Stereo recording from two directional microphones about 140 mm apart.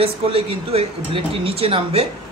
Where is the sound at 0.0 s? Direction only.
45° right (ahead or behind).